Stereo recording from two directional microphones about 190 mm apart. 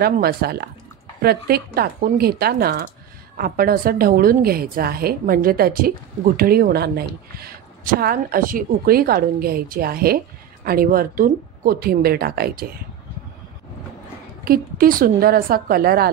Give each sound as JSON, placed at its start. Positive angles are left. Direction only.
{"t": 0.0, "sound": "a woman's voice", "side_deg": -55}
{"t": 14.4, "sound": "a woman's voice", "side_deg": -50}